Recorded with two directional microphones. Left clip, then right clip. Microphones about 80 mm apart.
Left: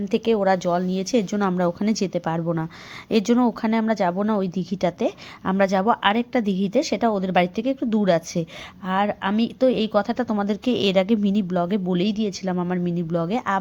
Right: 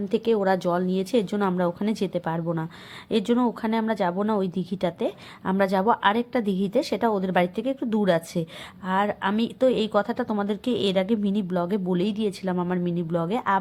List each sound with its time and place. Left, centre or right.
0.0 s a woman's voice: centre; by 11.4 s left
11.4 s speech: centre